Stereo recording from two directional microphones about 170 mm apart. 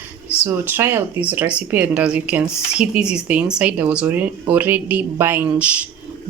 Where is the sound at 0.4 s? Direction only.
10° right (ahead or behind).